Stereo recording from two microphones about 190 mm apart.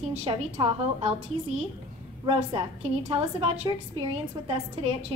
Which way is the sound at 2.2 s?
25° right (ahead or behind).